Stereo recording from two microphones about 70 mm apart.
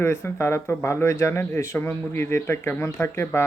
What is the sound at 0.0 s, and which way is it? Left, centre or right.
Speech, left.